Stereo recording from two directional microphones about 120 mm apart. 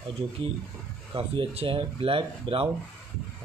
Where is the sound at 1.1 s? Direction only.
55° right (ahead or behind).